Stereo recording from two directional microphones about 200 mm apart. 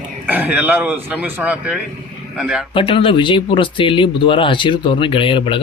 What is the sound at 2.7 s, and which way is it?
Speech, 25° left (ahead or behind).